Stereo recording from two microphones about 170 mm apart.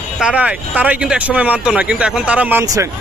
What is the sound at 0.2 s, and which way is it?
Speech, 5° right (ahead or behind).